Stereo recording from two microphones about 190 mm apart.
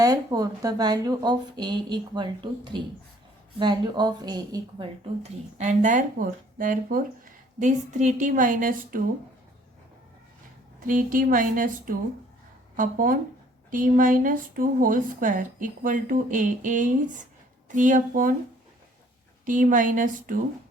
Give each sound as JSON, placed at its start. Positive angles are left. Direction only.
{"t": 0.0, "sound": "speech", "side_deg": -20}
{"t": 5.2, "sound": "speech", "side_deg": -40}
{"t": 10.8, "sound": "speech", "side_deg": -45}
{"t": 19.5, "sound": "speech", "side_deg": -45}